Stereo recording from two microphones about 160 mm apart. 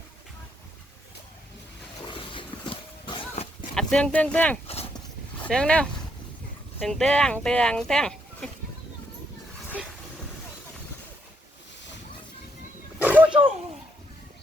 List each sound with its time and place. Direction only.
2.0 s wild animals: 30° left (ahead or behind)
3.8 s speech: 5° left (ahead or behind)
4.6 s a sound: 40° left (ahead or behind)
5.4 s speech: 5° left (ahead or behind)
13.0 s roaring cats: 10° right (ahead or behind)